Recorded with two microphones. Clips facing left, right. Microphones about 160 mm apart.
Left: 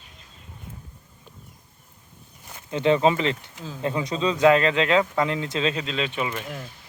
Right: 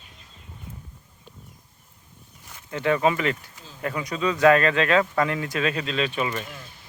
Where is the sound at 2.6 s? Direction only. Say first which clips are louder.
Left 2 dB; 20° left (ahead or behind).